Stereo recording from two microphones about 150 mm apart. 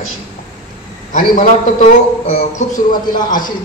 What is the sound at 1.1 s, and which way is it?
A man's voice, 60° left (ahead or behind).